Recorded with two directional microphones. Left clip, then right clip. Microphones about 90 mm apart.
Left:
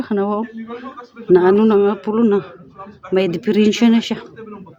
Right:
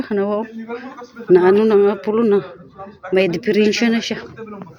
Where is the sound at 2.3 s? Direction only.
10° left (ahead or behind).